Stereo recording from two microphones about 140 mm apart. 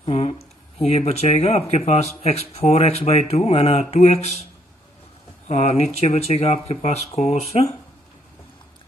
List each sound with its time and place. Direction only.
0.0 s speech: 40° left (ahead or behind)
5.5 s speech: 50° left (ahead or behind)